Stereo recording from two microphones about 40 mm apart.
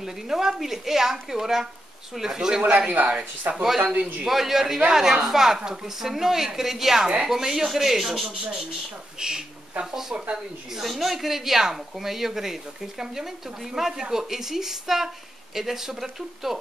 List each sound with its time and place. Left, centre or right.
0.0 s speech: centre
3.1 s speech: right
3.6 s speech: centre
9.2 s speech: centre
10.1 s speech: right
10.8 s speech: centre